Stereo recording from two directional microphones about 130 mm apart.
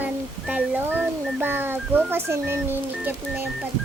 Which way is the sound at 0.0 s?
10° right (ahead or behind).